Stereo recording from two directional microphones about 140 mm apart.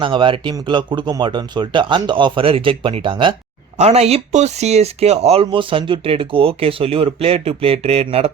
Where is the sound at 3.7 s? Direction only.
50° right (ahead or behind).